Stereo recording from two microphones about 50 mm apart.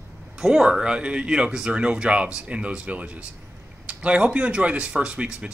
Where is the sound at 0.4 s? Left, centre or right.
Centre.